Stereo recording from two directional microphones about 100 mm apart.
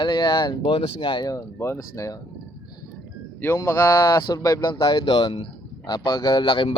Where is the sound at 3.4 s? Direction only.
25° left (ahead or behind).